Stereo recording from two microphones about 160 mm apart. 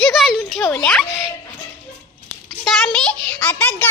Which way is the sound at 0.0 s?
Centre (ahead or behind).